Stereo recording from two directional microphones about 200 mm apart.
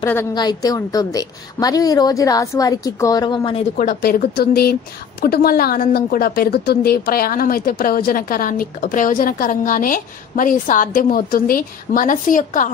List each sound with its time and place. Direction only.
0.0 s a woman's voice: 15° left (ahead or behind)
3.7 s a woman's voice: 40° left (ahead or behind)